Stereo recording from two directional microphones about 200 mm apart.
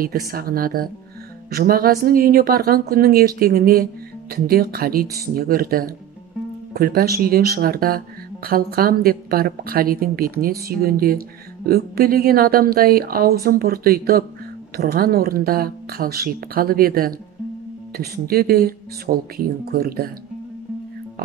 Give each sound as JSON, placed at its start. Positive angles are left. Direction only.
{"t": 0.0, "sound": "speech", "side_deg": -45}